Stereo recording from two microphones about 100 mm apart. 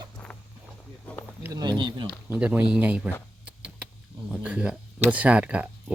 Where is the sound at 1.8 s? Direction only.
50° right (ahead or behind).